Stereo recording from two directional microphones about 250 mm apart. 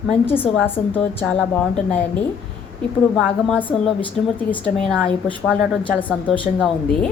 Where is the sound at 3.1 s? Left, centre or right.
Centre.